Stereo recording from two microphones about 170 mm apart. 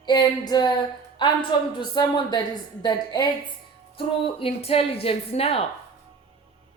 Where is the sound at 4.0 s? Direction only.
35° left (ahead or behind).